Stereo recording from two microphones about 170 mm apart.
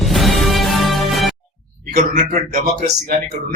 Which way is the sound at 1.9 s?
50° right (ahead or behind).